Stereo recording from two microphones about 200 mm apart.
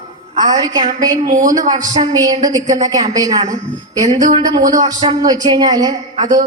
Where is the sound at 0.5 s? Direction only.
20° right (ahead or behind).